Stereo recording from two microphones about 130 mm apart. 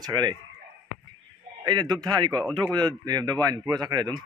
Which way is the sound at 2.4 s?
10° left (ahead or behind).